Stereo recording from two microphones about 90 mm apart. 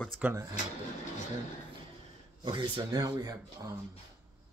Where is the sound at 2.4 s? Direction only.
60° right (ahead or behind).